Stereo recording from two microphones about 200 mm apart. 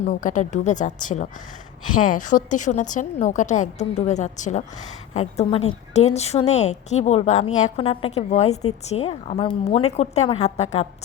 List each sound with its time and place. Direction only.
0.1 s a woman's voice: 40° left (ahead or behind)